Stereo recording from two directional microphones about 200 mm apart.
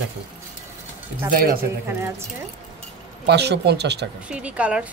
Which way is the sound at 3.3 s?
55° right (ahead or behind).